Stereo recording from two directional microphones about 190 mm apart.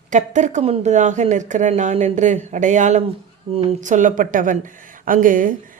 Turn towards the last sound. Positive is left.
turn(degrees=-45)  # may be behind; listen again after turning